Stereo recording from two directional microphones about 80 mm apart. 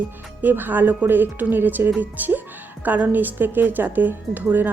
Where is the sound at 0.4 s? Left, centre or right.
Right.